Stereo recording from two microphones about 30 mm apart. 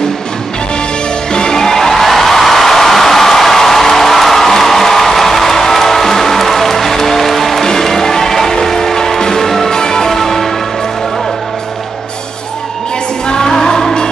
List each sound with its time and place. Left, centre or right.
1.3 s music: left; by 7.6 s centre
7.6 s music: centre
9.7 s music: left
10.0 s music: centre
13.3 s music: left